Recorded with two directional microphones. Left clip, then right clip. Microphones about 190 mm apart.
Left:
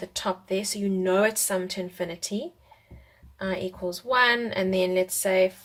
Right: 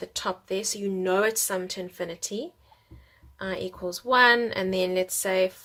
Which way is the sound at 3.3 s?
15° right (ahead or behind).